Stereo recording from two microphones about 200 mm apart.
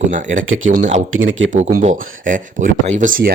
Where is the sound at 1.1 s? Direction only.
75° right (ahead or behind).